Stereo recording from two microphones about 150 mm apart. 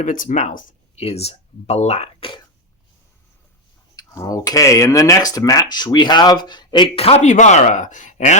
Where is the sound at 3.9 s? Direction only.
25° left (ahead or behind).